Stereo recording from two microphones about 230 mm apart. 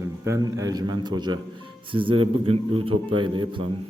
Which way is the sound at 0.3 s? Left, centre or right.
Centre.